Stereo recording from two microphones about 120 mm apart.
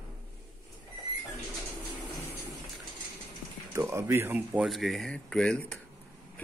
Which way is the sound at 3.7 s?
25° right (ahead or behind).